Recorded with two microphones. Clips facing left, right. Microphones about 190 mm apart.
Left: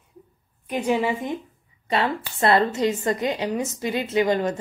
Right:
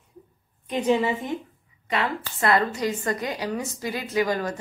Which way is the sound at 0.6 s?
10° left (ahead or behind).